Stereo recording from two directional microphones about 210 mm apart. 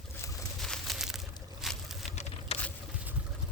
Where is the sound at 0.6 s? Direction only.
Centre (ahead or behind).